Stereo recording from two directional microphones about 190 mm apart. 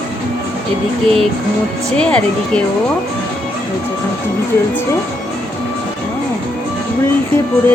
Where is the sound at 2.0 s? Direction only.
5° left (ahead or behind).